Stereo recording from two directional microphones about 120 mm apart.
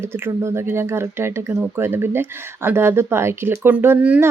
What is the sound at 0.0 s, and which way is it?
A woman's voice, 20° right (ahead or behind).